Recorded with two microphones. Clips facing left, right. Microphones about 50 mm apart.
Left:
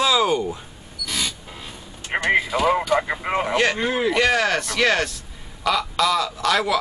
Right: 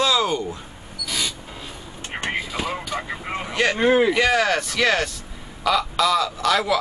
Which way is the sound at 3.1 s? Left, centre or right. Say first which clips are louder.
Left 6 dB; left.